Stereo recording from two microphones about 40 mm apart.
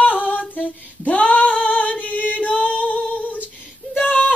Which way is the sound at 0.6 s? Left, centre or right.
Left.